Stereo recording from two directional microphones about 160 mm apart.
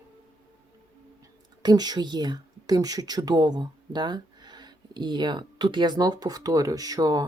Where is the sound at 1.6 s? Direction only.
25° right (ahead or behind).